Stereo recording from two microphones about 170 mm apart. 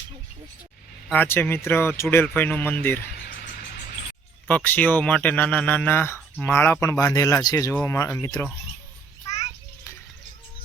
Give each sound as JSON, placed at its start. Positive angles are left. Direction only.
{"t": 1.1, "sound": "speech", "side_deg": 10}
{"t": 4.4, "sound": "speech", "side_deg": 10}